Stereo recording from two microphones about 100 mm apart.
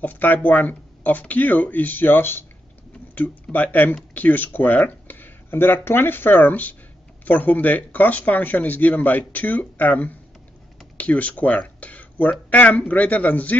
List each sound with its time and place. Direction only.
0.0 s speech: 20° left (ahead or behind)
3.5 s speech: 20° left (ahead or behind)